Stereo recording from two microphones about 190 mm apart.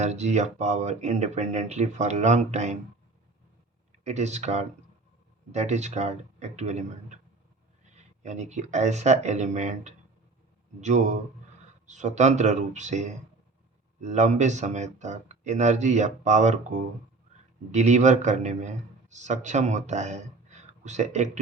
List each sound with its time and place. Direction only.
0.0 s speech: 35° right (ahead or behind)
3.9 s speech: 35° right (ahead or behind)
17.7 s speech: 35° right (ahead or behind)